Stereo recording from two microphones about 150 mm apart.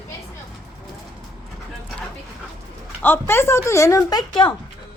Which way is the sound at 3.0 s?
15° left (ahead or behind).